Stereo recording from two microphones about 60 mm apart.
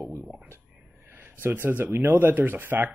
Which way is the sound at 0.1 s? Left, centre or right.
Right.